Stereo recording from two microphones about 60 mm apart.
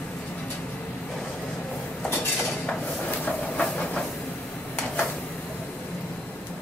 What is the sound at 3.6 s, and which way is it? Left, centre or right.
Train, centre.